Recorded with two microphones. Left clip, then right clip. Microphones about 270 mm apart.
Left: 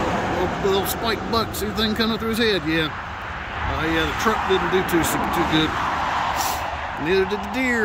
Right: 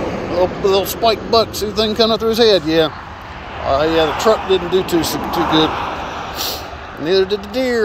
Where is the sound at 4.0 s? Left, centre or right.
Centre.